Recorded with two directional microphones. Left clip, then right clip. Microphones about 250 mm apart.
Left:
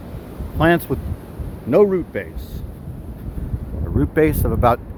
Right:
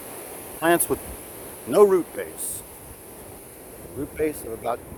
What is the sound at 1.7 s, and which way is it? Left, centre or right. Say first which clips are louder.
Speech: left 2 dB; centre.